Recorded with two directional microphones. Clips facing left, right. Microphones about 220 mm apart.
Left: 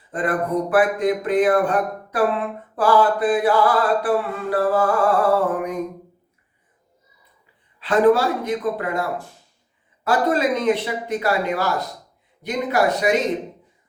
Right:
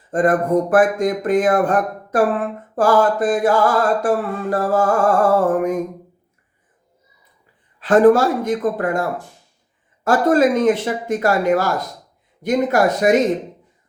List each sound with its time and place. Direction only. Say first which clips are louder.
0.1 s speech: right 6 dB; 45° right (ahead or behind)
7.8 s speech: right 4 dB; 45° right (ahead or behind)